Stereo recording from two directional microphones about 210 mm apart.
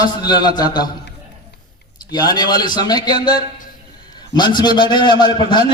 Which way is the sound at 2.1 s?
20° left (ahead or behind).